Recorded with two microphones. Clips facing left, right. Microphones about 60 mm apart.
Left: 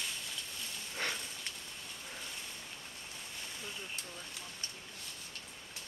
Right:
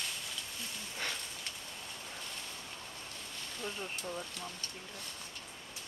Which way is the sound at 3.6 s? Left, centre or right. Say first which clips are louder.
Right 8 dB; right.